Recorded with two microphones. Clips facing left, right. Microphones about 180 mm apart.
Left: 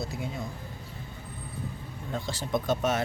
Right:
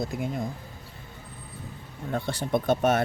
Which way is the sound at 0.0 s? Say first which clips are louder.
Right 5 dB; 50° right (ahead or behind).